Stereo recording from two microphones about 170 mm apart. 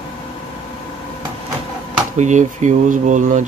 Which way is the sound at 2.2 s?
45° right (ahead or behind).